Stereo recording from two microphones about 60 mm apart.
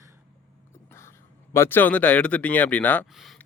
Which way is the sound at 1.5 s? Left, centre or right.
Left.